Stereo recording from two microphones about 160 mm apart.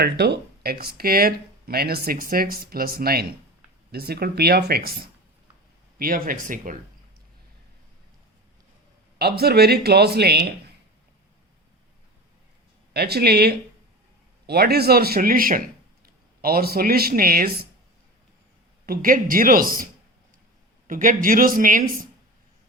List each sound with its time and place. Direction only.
0.0 s speech: 90° right
6.0 s speech: 65° right (ahead or behind)
9.1 s speech: 80° right
12.9 s speech: 85° right; by 17.7 s 65° right (ahead or behind)
18.9 s speech: 60° right (ahead or behind)